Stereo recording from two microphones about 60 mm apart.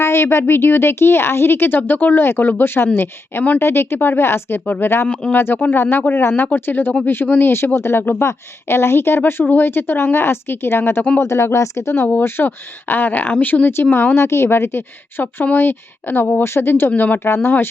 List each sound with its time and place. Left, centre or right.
0.0 s a woman's voice: left
4.6 s speech: left
5.3 s speech: left
11.2 s a woman's voice: left
11.9 s a woman's voice: left